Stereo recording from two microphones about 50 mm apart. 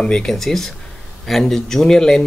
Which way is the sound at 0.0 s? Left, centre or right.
Centre.